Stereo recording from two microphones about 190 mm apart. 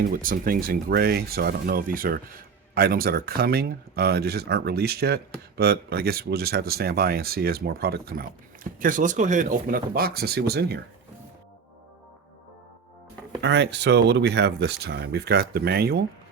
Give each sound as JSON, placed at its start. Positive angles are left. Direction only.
{"t": 0.1, "sound": "speech", "side_deg": -50}
{"t": 8.8, "sound": "speech", "side_deg": -45}
{"t": 13.4, "sound": "speech", "side_deg": -65}